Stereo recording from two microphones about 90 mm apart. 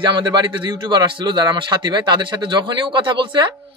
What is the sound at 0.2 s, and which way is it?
A man's voice, 55° right (ahead or behind).